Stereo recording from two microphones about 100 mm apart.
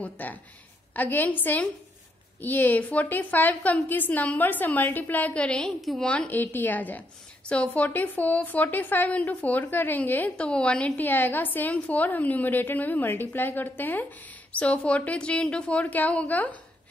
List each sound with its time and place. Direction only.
0.0 s a woman's voice: 15° left (ahead or behind); by 6.0 s centre (ahead or behind)
6.0 s a woman's voice: 15° left (ahead or behind)